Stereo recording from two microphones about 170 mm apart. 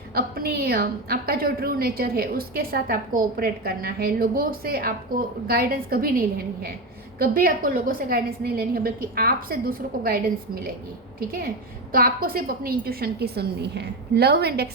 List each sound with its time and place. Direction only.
0.1 s a woman's voice: 65° right (ahead or behind)